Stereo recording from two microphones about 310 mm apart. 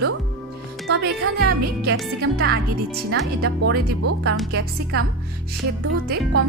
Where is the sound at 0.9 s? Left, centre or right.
Right.